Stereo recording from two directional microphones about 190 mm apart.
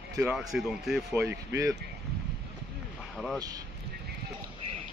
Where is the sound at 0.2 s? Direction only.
5° right (ahead or behind).